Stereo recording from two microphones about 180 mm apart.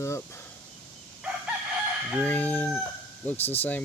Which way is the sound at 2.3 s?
10° left (ahead or behind).